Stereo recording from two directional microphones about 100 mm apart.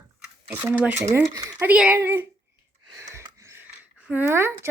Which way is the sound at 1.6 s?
10° right (ahead or behind).